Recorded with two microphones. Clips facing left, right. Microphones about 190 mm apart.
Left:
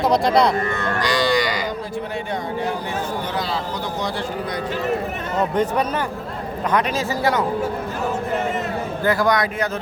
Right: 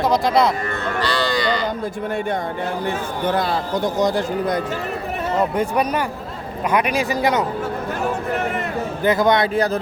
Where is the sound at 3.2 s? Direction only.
55° right (ahead or behind).